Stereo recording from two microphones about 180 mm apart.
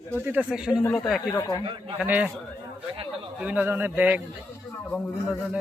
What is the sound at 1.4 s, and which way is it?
Speech, 20° left (ahead or behind).